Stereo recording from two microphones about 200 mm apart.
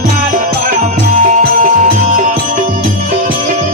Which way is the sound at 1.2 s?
40° right (ahead or behind).